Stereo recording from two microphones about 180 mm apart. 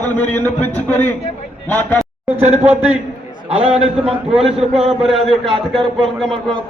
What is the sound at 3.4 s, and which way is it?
A man's voice, 35° right (ahead or behind).